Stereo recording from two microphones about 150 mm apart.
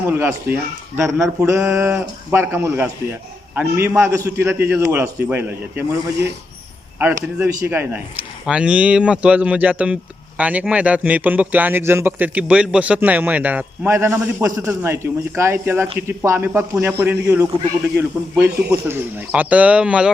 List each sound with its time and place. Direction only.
0.0 s a man's voice: 15° right (ahead or behind)
7.0 s a man's voice: 15° right (ahead or behind)